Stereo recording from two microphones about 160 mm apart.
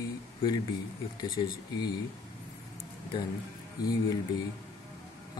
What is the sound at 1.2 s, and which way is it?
Speech, 25° left (ahead or behind).